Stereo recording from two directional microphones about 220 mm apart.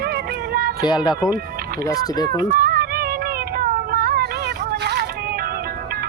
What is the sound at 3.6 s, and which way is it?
Child singing, 40° right (ahead or behind).